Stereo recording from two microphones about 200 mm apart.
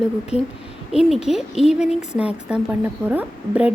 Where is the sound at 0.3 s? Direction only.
30° left (ahead or behind).